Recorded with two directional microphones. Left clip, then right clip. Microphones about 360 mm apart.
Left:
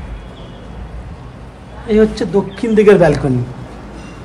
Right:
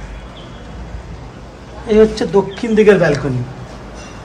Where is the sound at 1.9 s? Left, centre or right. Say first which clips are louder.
Right 2 dB; centre.